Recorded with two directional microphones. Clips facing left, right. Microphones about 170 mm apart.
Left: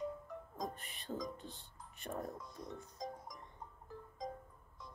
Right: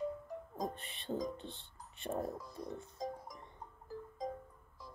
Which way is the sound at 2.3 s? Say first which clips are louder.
Right 4 dB; 5° right (ahead or behind).